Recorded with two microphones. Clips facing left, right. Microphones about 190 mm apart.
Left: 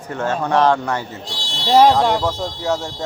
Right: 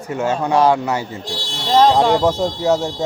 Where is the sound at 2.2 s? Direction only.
25° right (ahead or behind).